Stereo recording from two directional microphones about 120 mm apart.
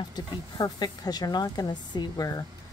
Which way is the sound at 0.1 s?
35° left (ahead or behind).